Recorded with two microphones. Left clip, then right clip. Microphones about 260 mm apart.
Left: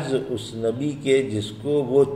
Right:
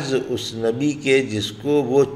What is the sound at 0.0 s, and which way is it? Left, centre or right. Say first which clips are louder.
A man's voice: right 3 dB; right.